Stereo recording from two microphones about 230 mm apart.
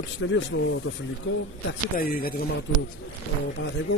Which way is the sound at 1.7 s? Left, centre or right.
Left.